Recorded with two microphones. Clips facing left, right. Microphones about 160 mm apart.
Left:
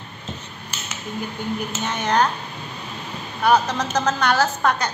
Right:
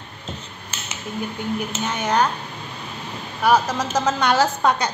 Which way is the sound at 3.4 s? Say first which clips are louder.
Even; 5° right (ahead or behind).